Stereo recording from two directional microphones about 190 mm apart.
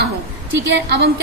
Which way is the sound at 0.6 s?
65° right (ahead or behind).